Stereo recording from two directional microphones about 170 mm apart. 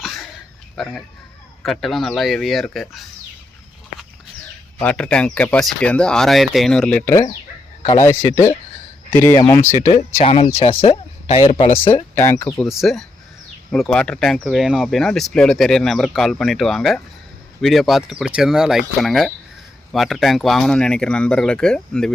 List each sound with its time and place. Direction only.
0.0 s a sound: centre (ahead or behind)
0.8 s speech: centre (ahead or behind)
4.8 s speech: 5° left (ahead or behind)
10.2 s speech: 35° left (ahead or behind)
11.7 s speech: 15° left (ahead or behind)
12.6 s speech: centre (ahead or behind)